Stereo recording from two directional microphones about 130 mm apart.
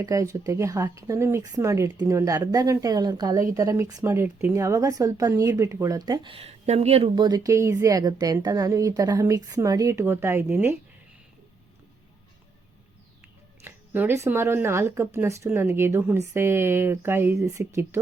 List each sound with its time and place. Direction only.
0.0 s speech: 25° right (ahead or behind); by 7.1 s 55° right (ahead or behind)
7.2 s speech: 30° right (ahead or behind)
13.7 s speech: 15° right (ahead or behind)